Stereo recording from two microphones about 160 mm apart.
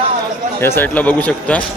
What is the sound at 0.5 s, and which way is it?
A man's voice, 15° left (ahead or behind).